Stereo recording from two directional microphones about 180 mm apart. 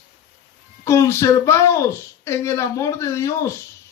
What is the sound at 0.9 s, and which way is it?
Speech, 15° left (ahead or behind).